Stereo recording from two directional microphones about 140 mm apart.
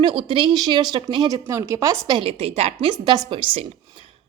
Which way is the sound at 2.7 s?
30° right (ahead or behind).